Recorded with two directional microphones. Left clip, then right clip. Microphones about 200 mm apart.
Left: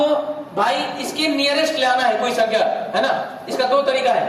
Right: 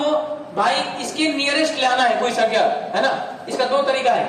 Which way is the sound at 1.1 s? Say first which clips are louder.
Left 1 dB; 15° right (ahead or behind).